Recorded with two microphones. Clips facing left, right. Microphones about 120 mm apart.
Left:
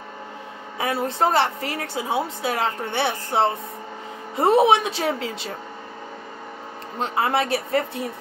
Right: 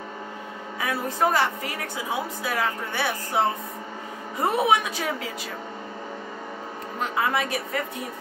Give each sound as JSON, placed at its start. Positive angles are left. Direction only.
{"t": 0.7, "sound": "a woman's voice", "side_deg": 25}
{"t": 7.0, "sound": "speech", "side_deg": 30}